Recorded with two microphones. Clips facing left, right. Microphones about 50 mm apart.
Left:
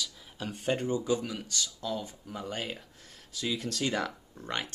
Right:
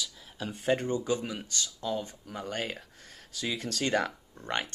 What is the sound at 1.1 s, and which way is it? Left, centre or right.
Speech, centre.